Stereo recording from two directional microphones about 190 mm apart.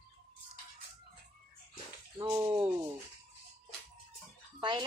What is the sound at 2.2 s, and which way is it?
Speech, 20° right (ahead or behind).